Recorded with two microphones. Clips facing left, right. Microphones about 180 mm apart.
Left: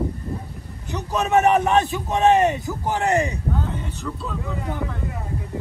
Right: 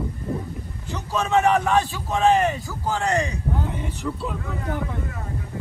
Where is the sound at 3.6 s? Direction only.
15° right (ahead or behind).